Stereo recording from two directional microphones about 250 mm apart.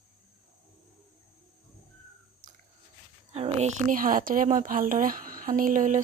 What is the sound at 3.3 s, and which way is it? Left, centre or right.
Speech, right.